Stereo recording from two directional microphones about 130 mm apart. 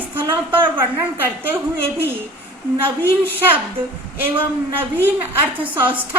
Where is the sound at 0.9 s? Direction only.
15° right (ahead or behind).